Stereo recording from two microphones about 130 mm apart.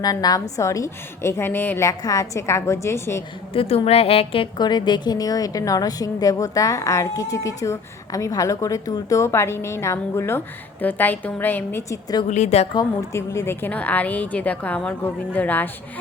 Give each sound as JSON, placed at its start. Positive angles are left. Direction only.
{"t": 0.0, "sound": "a woman's voice", "side_deg": 30}
{"t": 1.9, "sound": "a woman's voice", "side_deg": 25}
{"t": 3.5, "sound": "a woman's voice", "side_deg": 45}
{"t": 12.3, "sound": "a woman's voice", "side_deg": 60}
{"t": 12.7, "sound": "a woman's voice", "side_deg": 25}